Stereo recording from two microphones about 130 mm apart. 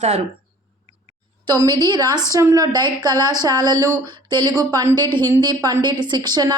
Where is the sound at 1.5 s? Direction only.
30° right (ahead or behind).